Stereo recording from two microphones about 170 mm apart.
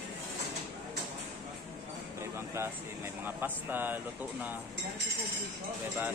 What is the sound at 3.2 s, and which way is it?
Speech, 10° right (ahead or behind).